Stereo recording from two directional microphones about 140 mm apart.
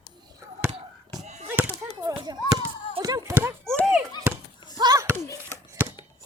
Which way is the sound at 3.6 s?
Centre (ahead or behind).